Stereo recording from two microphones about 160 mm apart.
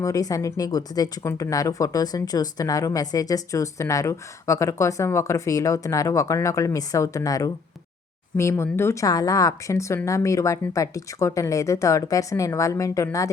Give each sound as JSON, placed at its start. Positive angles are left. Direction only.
{"t": 0.0, "sound": "speech", "side_deg": 20}